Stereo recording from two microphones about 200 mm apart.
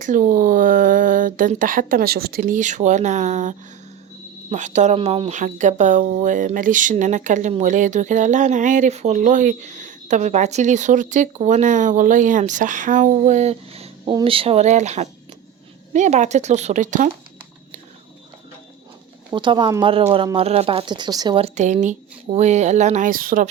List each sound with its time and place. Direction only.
0.0 s speech: 40° right (ahead or behind)
19.3 s a woman's voice: 20° right (ahead or behind); by 23.5 s 45° right (ahead or behind)